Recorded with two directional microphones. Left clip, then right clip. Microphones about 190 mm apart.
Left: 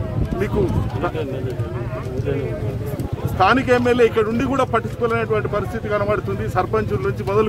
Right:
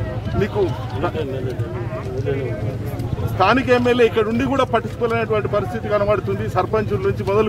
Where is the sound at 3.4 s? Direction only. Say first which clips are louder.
Even; 10° left (ahead or behind).